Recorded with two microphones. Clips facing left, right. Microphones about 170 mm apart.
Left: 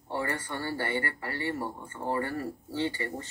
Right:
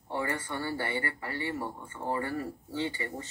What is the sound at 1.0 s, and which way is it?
Speech, 20° right (ahead or behind).